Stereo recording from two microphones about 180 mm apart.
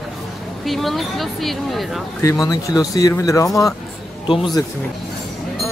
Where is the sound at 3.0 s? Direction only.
20° left (ahead or behind).